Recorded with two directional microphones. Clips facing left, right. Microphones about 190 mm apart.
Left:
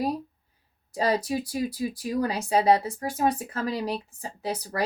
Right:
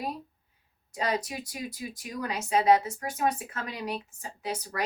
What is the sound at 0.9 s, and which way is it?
Speech, 35° left (ahead or behind).